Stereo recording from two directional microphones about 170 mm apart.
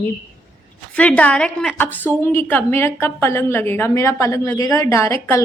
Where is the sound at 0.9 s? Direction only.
5° left (ahead or behind).